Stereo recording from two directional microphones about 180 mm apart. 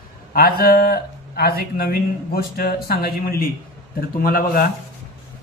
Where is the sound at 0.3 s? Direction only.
55° left (ahead or behind).